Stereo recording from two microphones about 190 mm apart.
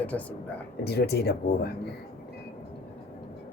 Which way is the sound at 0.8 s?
60° left (ahead or behind).